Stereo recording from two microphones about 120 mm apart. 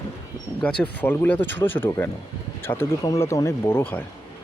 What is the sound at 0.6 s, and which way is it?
Speech, 10° left (ahead or behind).